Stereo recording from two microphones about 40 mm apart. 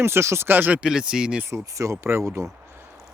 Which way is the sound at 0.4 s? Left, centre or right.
Right.